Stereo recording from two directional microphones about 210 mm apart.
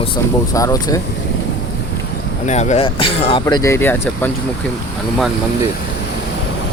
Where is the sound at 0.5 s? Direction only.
15° left (ahead or behind).